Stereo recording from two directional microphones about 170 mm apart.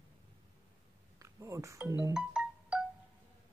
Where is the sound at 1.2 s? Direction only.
20° right (ahead or behind).